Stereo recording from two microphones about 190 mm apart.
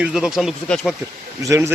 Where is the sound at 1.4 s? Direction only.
15° right (ahead or behind).